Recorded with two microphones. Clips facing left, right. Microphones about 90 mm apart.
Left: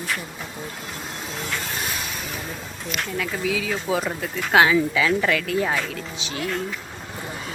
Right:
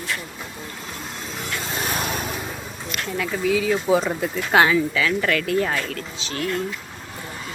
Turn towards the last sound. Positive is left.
turn(degrees=10)  # may be behind; listen again after turning